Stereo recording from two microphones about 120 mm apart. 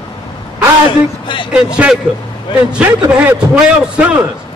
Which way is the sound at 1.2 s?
40° left (ahead or behind).